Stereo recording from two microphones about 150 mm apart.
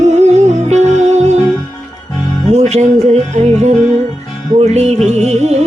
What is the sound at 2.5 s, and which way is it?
Music, 45° right (ahead or behind).